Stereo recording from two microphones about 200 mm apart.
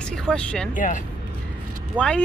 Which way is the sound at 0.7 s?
40° left (ahead or behind).